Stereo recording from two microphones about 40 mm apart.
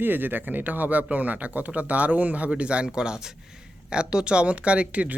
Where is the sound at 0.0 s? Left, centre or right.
Right.